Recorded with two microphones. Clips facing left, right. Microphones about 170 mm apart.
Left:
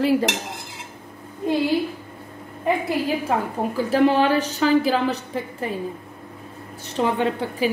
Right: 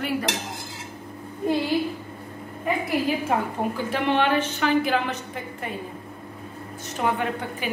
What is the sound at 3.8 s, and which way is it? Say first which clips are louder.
A woman's voice: left 6 dB; 35° left (ahead or behind).